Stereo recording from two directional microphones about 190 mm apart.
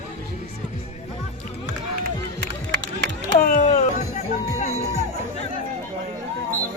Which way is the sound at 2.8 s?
75° right (ahead or behind).